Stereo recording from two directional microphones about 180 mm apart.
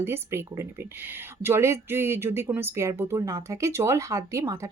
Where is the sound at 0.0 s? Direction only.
15° right (ahead or behind).